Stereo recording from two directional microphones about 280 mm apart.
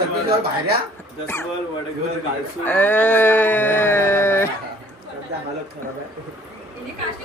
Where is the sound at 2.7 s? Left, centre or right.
Centre.